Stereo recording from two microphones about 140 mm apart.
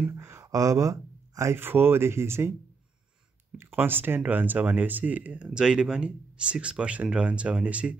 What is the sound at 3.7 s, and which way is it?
Speech, 15° right (ahead or behind).